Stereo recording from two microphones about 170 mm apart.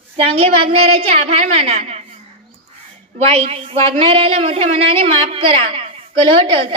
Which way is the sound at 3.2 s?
35° right (ahead or behind).